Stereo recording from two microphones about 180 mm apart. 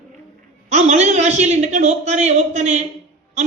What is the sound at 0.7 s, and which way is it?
A man's voice, 40° right (ahead or behind).